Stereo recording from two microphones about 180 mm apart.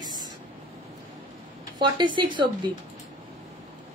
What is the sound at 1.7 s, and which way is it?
Speech, 25° right (ahead or behind).